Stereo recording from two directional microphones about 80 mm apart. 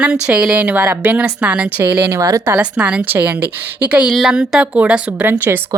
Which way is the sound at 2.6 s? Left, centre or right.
Centre.